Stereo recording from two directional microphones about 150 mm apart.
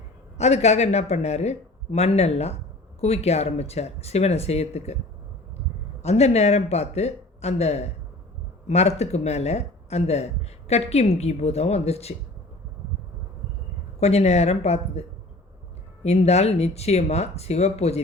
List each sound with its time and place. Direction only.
0.3 s speech: 45° left (ahead or behind)
6.0 s speech: 45° left (ahead or behind)
14.0 s speech: 45° left (ahead or behind)
16.0 s speech: 45° left (ahead or behind)